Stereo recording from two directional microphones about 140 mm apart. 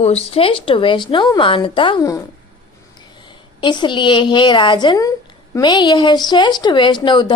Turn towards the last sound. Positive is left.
turn(degrees=35)  # may be behind; listen again after turning